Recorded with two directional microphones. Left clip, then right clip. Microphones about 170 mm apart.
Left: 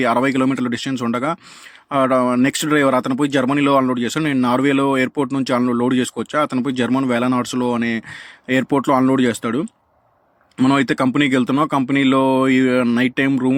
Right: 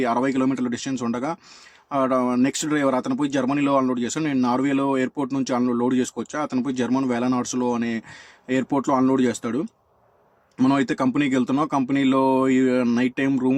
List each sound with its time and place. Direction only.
0.0 s speech: 25° left (ahead or behind)